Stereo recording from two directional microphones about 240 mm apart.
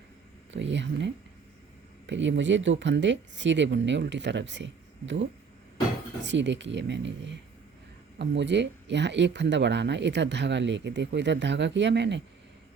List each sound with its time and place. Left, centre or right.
0.5 s speech: right